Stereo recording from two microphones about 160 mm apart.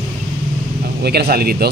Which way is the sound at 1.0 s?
85° right.